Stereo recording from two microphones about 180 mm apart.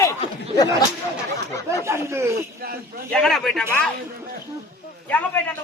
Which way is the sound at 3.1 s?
Centre (ahead or behind).